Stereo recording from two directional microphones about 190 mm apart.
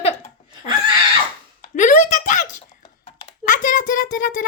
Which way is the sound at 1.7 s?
40° left (ahead or behind).